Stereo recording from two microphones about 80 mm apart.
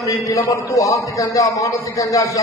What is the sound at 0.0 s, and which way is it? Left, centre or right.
A man's voice, left.